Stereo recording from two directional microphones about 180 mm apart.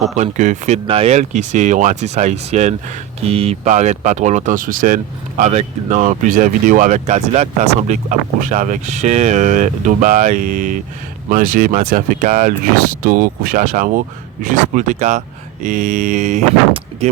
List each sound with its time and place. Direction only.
0.2 s speech: 40° right (ahead or behind)
5.4 s speech: 40° right (ahead or behind)